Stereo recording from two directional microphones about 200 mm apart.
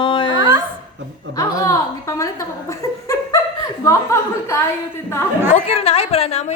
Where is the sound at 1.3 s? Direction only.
15° left (ahead or behind).